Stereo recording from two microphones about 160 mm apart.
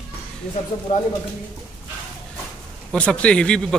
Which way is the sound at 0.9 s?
50° left (ahead or behind).